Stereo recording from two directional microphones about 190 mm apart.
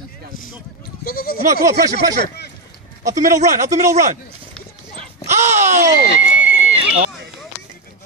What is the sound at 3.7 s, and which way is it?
Speech, 40° right (ahead or behind).